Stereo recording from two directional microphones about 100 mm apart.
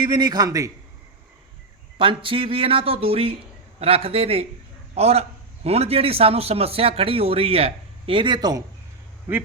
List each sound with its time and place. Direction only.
0.0 s a man's voice: 45° right (ahead or behind)
2.0 s speech: 60° right (ahead or behind); by 4.4 s 75° right (ahead or behind)
4.9 s a man's voice: 90° right; by 8.6 s 45° right (ahead or behind)